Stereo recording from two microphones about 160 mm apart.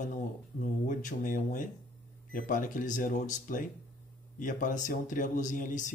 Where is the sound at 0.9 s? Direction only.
55° left (ahead or behind).